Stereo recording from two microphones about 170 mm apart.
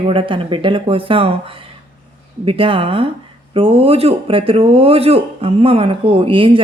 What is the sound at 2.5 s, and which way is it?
A man's voice, 30° right (ahead or behind).